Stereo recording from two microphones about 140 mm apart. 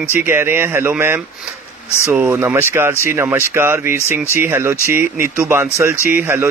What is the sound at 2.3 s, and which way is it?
Speech, 15° right (ahead or behind).